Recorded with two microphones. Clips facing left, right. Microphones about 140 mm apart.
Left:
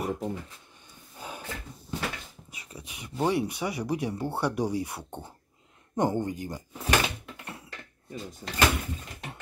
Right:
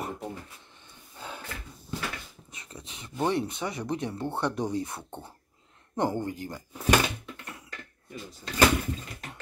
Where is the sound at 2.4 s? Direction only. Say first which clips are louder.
Even; 10° left (ahead or behind).